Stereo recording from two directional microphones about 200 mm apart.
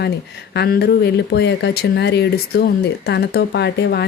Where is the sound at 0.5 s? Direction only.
55° left (ahead or behind).